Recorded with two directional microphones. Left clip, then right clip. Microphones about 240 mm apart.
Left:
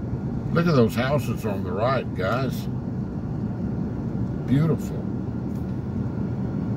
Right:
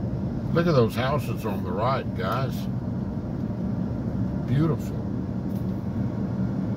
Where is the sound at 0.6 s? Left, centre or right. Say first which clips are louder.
Left 1 dB; centre.